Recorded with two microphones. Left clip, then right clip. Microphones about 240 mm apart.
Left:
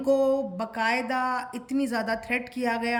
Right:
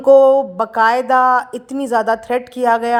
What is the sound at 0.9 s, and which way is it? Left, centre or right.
Speech, right.